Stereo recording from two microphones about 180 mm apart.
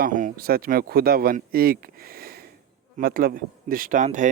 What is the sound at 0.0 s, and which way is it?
Speech, 45° right (ahead or behind).